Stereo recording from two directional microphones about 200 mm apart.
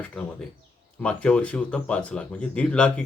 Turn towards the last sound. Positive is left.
turn(degrees=5)  # may be behind; listen again after turning